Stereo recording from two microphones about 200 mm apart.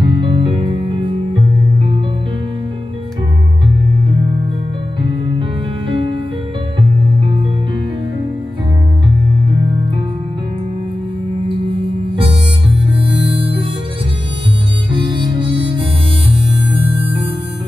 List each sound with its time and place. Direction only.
0.0 s music: 25° right (ahead or behind)
11.4 s harmonica: 25° right (ahead or behind)
14.9 s music: 25° right (ahead or behind)